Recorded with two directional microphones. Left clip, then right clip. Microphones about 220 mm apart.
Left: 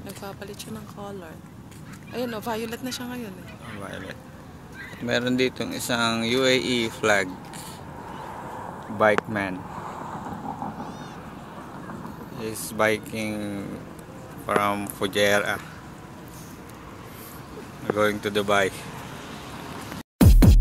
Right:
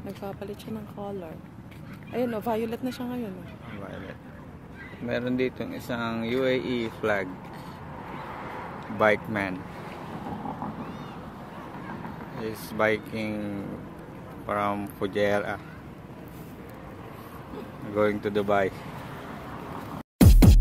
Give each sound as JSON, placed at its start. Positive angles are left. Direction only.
{"t": 0.2, "sound": "speech", "side_deg": -30}
{"t": 2.1, "sound": "speech", "side_deg": -30}
{"t": 5.0, "sound": "speech", "side_deg": 15}
{"t": 8.4, "sound": "a sound", "side_deg": 30}
{"t": 8.9, "sound": "speech", "side_deg": 0}
{"t": 12.4, "sound": "speech", "side_deg": 0}
{"t": 17.9, "sound": "speech", "side_deg": -5}
{"t": 20.2, "sound": "music", "side_deg": 0}